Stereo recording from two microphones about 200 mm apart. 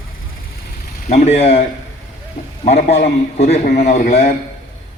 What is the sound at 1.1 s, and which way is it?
A man's voice, 35° left (ahead or behind).